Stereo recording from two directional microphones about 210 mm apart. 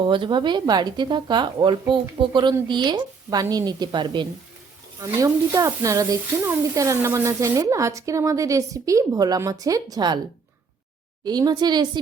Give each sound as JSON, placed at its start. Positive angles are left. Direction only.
{"t": 0.1, "sound": "a woman's voice", "side_deg": -20}
{"t": 11.3, "sound": "a woman's voice", "side_deg": -20}